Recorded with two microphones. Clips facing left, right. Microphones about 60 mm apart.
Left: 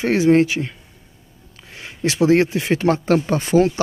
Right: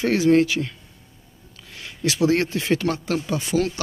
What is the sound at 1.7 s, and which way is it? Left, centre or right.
Speech, left.